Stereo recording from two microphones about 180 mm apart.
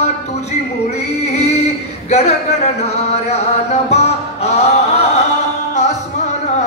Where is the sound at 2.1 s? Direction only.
35° left (ahead or behind).